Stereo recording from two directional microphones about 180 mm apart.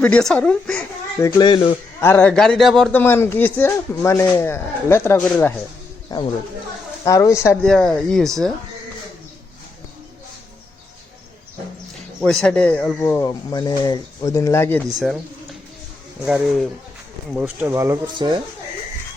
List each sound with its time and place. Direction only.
0.0 s speech: 5° left (ahead or behind)
1.2 s speech: 25° left (ahead or behind)
2.0 s speech: 10° left (ahead or behind)
2.9 s speech: 10° left (ahead or behind)
7.5 s speech: 5° left (ahead or behind)
12.2 s speech: 5° left (ahead or behind)
13.0 s speech: 20° left (ahead or behind)
14.9 s speech: centre (ahead or behind)
16.2 s speech: 5° right (ahead or behind)
17.4 s speech: 15° right (ahead or behind)